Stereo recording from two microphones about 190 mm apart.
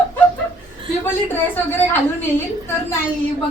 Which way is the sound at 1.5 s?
10° left (ahead or behind).